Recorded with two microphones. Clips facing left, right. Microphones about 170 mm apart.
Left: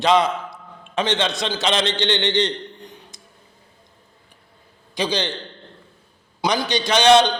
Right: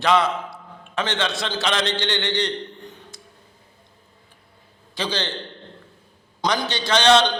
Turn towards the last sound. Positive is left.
turn(degrees=15)  # may be behind; listen again after turning